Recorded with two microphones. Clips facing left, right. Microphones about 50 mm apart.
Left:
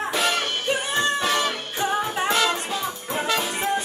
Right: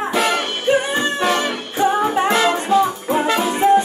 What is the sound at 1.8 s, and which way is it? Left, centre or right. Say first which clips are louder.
Music: right 8 dB; right.